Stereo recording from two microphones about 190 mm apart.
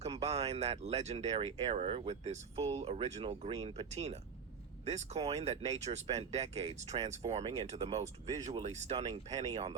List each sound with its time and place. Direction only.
0.0 s speech: 35° right (ahead or behind)